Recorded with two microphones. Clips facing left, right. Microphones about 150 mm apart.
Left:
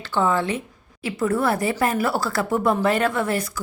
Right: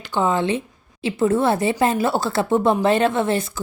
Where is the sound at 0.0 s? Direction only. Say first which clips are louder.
Right 1 dB; 15° right (ahead or behind).